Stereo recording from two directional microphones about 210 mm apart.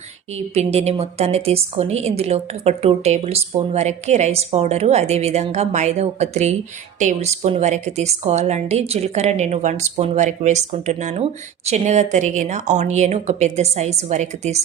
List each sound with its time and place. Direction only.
0.3 s a woman's voice: 30° right (ahead or behind)